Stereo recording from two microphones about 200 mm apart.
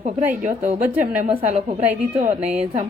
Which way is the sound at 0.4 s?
35° right (ahead or behind).